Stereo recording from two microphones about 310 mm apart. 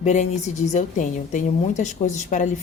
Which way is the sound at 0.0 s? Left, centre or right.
Left.